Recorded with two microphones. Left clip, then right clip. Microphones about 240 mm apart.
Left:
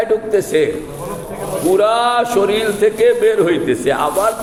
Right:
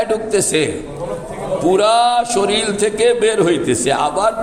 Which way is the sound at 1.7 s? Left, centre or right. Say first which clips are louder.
Even; right.